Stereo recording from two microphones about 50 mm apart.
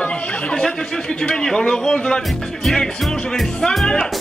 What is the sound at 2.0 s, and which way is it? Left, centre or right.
Speech, centre.